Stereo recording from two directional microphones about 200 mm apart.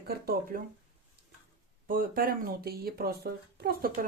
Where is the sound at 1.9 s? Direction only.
45° right (ahead or behind).